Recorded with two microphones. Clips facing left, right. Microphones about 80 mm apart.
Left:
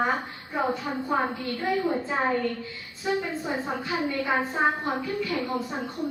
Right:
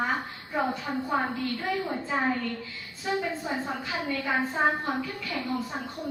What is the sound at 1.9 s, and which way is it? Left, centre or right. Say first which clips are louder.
Speech: left 2 dB; centre.